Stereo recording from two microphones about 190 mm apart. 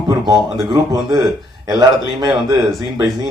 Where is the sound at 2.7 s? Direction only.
Centre (ahead or behind).